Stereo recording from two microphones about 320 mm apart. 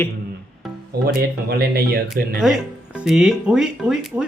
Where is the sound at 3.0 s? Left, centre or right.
Centre.